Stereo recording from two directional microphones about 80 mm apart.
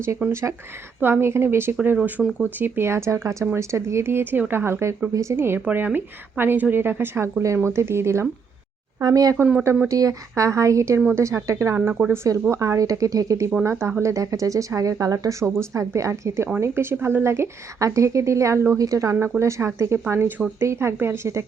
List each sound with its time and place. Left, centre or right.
0.2 s a woman's voice: right
5.5 s a woman's voice: right
9.0 s a woman's voice: right
18.8 s a woman's voice: right